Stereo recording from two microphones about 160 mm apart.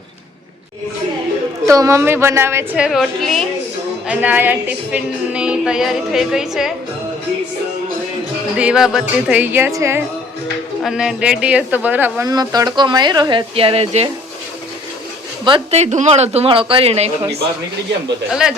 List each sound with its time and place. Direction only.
1.6 s a woman's voice: 20° right (ahead or behind)
2.7 s a woman's voice: 5° right (ahead or behind)
4.1 s a woman's voice: 10° right (ahead or behind)
8.5 s a woman's voice: 5° right (ahead or behind)
10.8 s speech: 5° right (ahead or behind); by 14.1 s 40° right (ahead or behind)
15.7 s speech: 45° right (ahead or behind)